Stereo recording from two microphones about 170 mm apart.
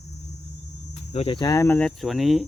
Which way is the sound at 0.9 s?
40° left (ahead or behind).